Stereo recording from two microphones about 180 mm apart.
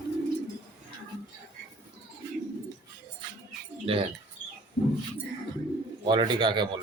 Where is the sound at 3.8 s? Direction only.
30° right (ahead or behind).